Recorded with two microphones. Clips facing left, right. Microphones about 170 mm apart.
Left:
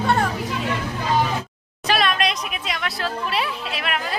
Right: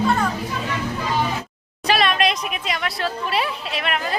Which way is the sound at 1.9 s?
Centre (ahead or behind).